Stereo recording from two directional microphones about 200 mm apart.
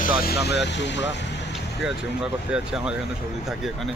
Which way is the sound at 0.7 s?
60° left (ahead or behind).